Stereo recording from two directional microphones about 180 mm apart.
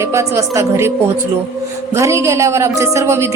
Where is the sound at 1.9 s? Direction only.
15° right (ahead or behind).